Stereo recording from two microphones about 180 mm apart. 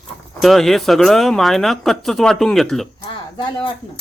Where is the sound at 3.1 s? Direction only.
25° left (ahead or behind).